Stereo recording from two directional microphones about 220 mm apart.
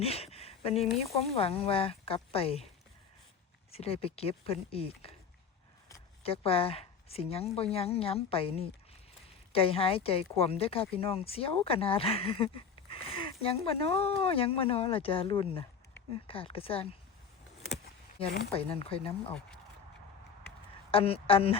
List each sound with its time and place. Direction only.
0.0 s a sound: 25° left (ahead or behind)
1.2 s speech: 25° left (ahead or behind)
3.7 s speech: 25° left (ahead or behind)
6.2 s speech: 25° left (ahead or behind)
18.5 s speech: 25° left (ahead or behind)
20.9 s speech: 25° left (ahead or behind)